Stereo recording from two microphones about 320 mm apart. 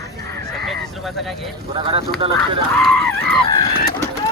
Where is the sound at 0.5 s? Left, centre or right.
Centre.